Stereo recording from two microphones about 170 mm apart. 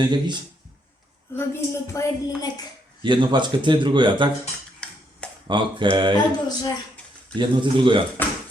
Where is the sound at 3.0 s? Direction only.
25° right (ahead or behind).